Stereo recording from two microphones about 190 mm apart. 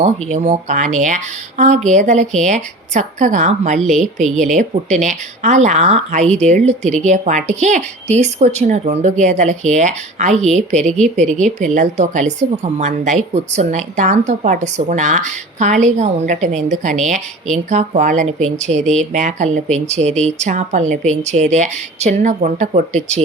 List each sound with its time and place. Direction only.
0.0 s a woman's voice: 35° right (ahead or behind)
3.8 s speech: centre (ahead or behind)
4.4 s a woman's voice: 40° right (ahead or behind)
11.0 s speech: 5° left (ahead or behind)
11.3 s a woman's voice: 40° right (ahead or behind)